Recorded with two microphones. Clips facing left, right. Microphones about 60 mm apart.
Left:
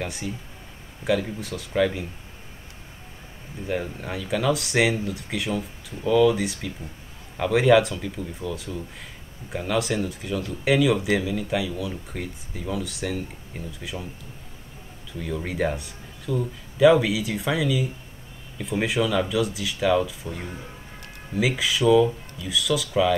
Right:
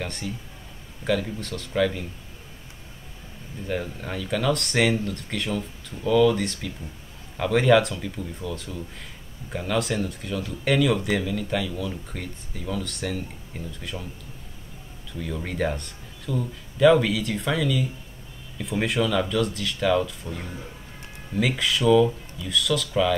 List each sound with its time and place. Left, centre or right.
0.0 s speech: centre
3.6 s speech: centre
15.1 s speech: centre